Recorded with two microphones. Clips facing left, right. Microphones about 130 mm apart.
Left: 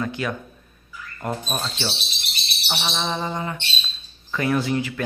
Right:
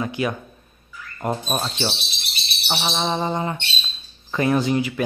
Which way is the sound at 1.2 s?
25° right (ahead or behind).